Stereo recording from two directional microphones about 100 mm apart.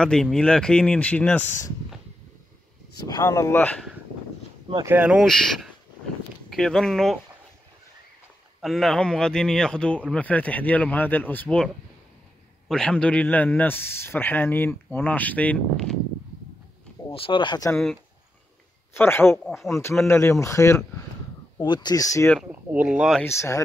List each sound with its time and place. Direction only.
0.0 s a man's voice: 5° left (ahead or behind)
3.1 s speech: 35° left (ahead or behind)
3.5 s a man's voice: 15° left (ahead or behind)
4.8 s speech: 15° right (ahead or behind)
5.2 s speech: centre (ahead or behind)
8.5 s a man's voice: centre (ahead or behind); by 11.5 s 20° left (ahead or behind)
12.6 s a man's voice: 5° left (ahead or behind)
17.1 s speech: 60° left (ahead or behind)
18.9 s speech: 25° left (ahead or behind)
19.4 s speech: centre (ahead or behind)
20.1 s speech: 25° left (ahead or behind)
21.5 s speech: 50° left (ahead or behind)
22.4 s speech: 15° right (ahead or behind)
23.2 s speech: 30° left (ahead or behind)